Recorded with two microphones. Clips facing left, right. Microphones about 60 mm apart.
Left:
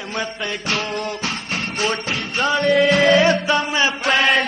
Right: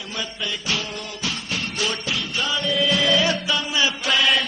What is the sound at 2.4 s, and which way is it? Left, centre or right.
Chant, left.